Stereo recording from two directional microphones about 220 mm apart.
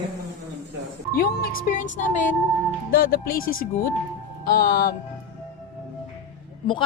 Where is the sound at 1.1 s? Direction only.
40° left (ahead or behind).